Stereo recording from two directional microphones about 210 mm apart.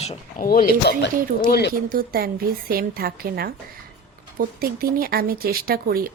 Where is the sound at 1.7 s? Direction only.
45° right (ahead or behind).